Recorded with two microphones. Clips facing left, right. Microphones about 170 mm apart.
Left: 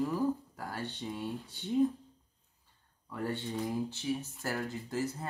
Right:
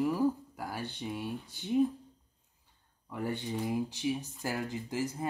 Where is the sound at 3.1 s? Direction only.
10° right (ahead or behind).